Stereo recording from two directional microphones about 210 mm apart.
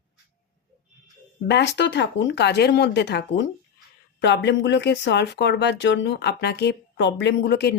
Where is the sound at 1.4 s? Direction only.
55° left (ahead or behind).